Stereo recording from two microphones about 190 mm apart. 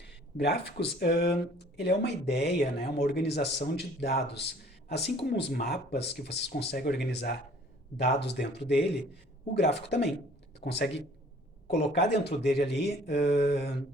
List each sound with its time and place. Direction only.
0.0 s speech: 60° left (ahead or behind)